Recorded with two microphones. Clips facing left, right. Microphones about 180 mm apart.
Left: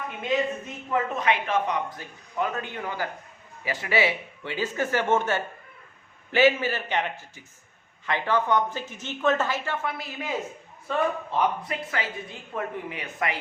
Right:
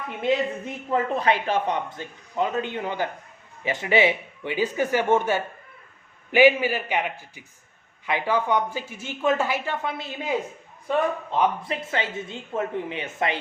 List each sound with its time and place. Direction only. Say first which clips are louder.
0.9 s speech: right 3 dB; 35° right (ahead or behind)